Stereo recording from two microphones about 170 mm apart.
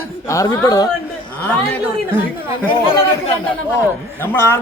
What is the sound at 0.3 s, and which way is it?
Speech, 20° left (ahead or behind).